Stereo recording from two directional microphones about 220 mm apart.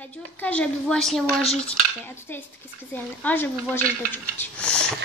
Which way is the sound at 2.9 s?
10° left (ahead or behind).